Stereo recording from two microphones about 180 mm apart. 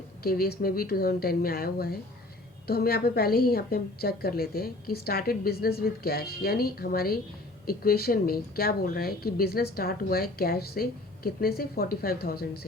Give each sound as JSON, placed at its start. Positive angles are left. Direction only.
{"t": 0.2, "sound": "speech", "side_deg": 55}